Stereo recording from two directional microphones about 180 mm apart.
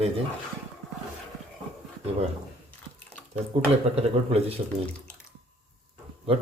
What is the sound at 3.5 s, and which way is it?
A man's voice, 35° right (ahead or behind).